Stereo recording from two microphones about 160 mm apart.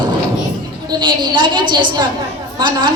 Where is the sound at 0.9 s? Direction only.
30° right (ahead or behind).